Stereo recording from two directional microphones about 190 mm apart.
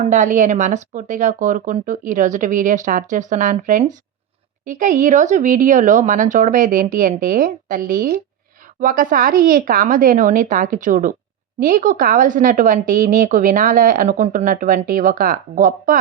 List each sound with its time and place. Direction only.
0.0 s a woman's voice: 40° right (ahead or behind)